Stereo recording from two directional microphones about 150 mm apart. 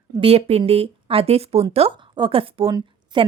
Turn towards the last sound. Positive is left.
turn(degrees=-30)  # may be behind; listen again after turning